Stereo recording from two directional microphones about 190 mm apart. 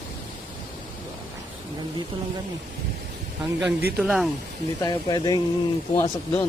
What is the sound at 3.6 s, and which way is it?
Speech, 5° right (ahead or behind).